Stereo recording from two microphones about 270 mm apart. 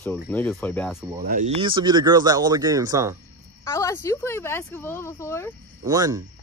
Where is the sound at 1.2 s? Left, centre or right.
Right; by 3.2 s centre.